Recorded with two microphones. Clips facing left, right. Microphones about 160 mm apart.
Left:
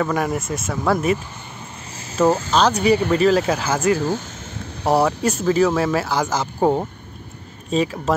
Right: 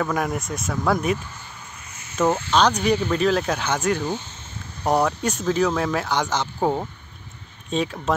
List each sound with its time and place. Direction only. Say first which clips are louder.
0.0 s speech: left 3 dB; centre (ahead or behind)
1.9 s a sound: left 8 dB; 30° left (ahead or behind)
2.2 s speech: left 4 dB; 40° left (ahead or behind)
2.5 s speech: left 3 dB; 5° left (ahead or behind)